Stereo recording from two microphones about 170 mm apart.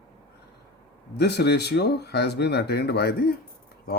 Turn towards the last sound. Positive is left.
turn(degrees=70)  # may be behind; listen again after turning